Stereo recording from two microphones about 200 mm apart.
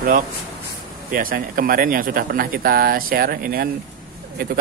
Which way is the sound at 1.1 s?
45° right (ahead or behind).